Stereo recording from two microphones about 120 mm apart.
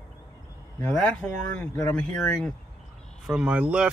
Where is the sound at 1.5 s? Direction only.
15° left (ahead or behind).